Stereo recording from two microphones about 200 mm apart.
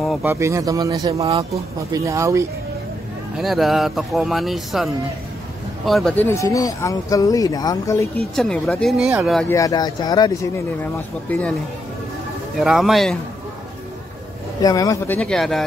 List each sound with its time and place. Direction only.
0.2 s speech: 15° right (ahead or behind)
3.3 s speech: centre (ahead or behind); by 8.1 s 15° left (ahead or behind)
8.4 s speech: 5° left (ahead or behind)
9.5 s speech: 15° left (ahead or behind)
10.8 s speech: 10° left (ahead or behind)
12.5 s speech: centre (ahead or behind)
14.6 s speech: 15° left (ahead or behind)
15.1 s speech: 5° left (ahead or behind)